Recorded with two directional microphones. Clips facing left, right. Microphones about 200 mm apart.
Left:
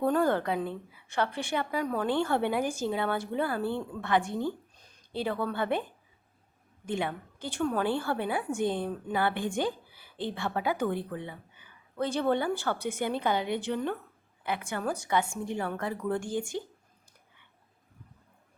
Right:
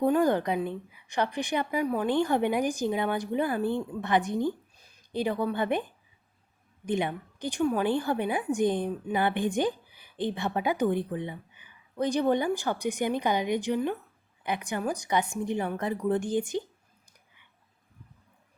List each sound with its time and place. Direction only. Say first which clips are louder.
0.0 s a woman's voice: right 2 dB; 15° right (ahead or behind)
6.8 s a woman's voice: right 3 dB; 20° right (ahead or behind)